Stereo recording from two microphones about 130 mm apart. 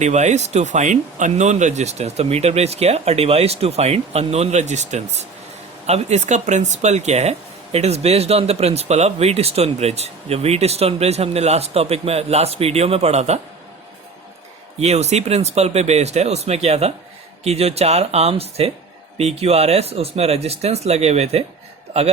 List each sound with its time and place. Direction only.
0.0 s speech: 65° right (ahead or behind)
14.8 s speech: 55° right (ahead or behind)